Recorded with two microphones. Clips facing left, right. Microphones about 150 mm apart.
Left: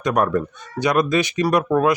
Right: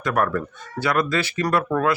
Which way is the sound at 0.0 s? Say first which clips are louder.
Left 3 dB; 20° left (ahead or behind).